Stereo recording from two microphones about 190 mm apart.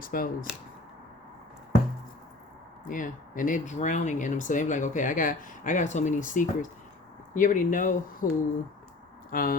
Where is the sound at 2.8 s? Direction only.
45° left (ahead or behind).